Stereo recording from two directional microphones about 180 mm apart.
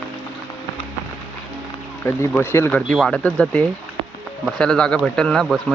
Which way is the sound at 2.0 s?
15° left (ahead or behind).